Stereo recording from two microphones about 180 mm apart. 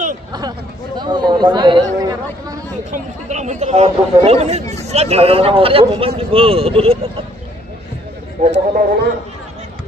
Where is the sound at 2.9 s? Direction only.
40° right (ahead or behind).